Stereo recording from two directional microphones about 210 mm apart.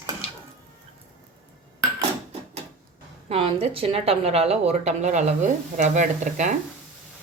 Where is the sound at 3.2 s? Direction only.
25° right (ahead or behind).